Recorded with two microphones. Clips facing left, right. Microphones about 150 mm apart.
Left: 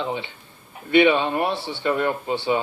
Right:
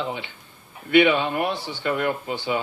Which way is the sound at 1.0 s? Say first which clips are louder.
Left 2 dB; 20° left (ahead or behind).